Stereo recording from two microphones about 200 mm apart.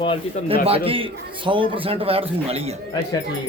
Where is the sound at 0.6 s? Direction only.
30° right (ahead or behind).